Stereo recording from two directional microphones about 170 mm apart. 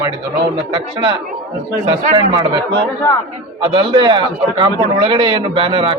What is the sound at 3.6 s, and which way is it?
A man's voice, 30° right (ahead or behind).